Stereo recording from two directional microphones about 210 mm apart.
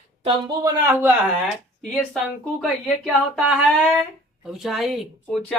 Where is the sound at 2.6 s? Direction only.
Centre (ahead or behind).